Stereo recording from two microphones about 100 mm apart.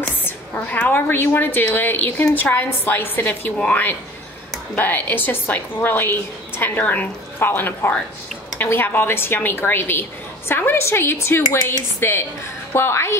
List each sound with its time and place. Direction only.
0.2 s a woman's voice: 20° left (ahead or behind)